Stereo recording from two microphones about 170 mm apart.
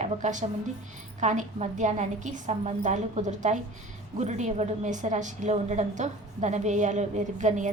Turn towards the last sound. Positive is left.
turn(degrees=-45)  # may be behind; listen again after turning